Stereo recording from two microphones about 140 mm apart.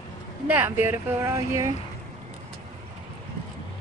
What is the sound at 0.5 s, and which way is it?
Speech, 15° right (ahead or behind).